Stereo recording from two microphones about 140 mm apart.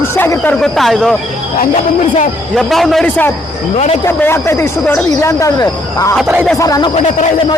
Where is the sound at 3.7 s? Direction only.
50° left (ahead or behind).